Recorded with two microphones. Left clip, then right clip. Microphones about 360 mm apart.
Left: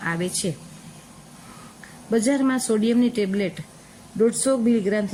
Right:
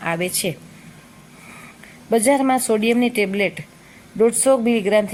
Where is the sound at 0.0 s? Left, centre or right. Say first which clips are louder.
Right 4 dB; centre.